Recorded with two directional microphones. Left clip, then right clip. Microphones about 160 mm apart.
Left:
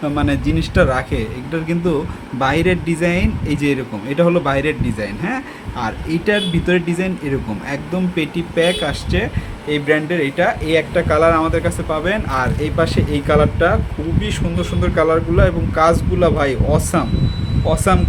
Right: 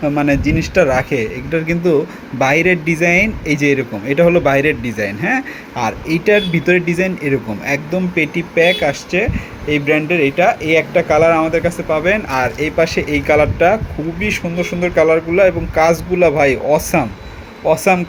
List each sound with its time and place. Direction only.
0.0 s speech: 10° right (ahead or behind)